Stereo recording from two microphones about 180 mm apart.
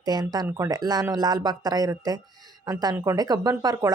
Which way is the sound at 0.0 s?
20° right (ahead or behind).